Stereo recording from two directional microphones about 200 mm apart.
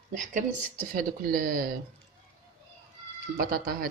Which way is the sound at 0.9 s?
45° right (ahead or behind).